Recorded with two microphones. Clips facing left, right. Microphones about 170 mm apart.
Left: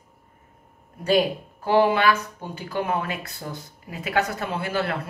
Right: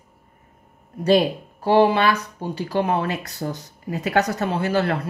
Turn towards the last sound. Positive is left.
turn(degrees=-40)  # may be behind; listen again after turning